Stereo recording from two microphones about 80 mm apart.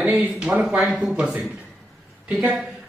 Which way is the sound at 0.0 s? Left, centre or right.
Centre.